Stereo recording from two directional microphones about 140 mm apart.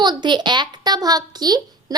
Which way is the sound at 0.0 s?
30° right (ahead or behind).